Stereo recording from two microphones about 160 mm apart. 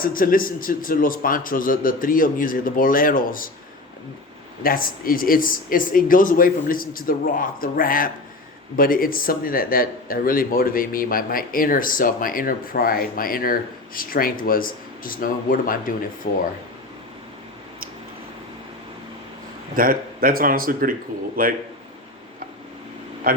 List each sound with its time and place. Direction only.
0.0 s speech: 65° left (ahead or behind)
4.6 s speech: 65° left (ahead or behind)
16.2 s speech: 75° left (ahead or behind)
19.7 s speech: 65° right (ahead or behind)
23.3 s speech: 65° right (ahead or behind)